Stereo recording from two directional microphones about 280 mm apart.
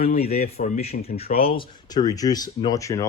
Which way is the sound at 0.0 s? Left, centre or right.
Left.